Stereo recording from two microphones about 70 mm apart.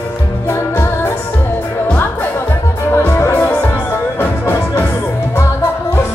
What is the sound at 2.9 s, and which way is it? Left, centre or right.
Music, left.